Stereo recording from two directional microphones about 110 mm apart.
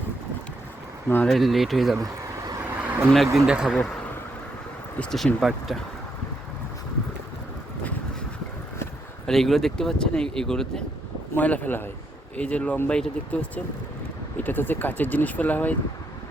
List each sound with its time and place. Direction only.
1.3 s speech: centre (ahead or behind)
2.0 s a sound: 35° right (ahead or behind)
2.6 s a sound: 20° right (ahead or behind)
3.3 s speech: 5° right (ahead or behind)
4.9 s speech: centre (ahead or behind)
9.2 s speech: 5° left (ahead or behind)